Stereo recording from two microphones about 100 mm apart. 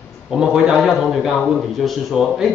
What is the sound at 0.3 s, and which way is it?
Speech, 5° right (ahead or behind).